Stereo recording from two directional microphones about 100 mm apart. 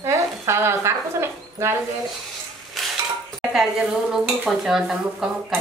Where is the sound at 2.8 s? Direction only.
Centre (ahead or behind).